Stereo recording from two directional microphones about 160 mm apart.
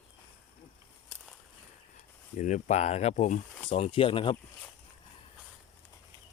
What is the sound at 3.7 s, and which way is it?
Speech, 35° left (ahead or behind).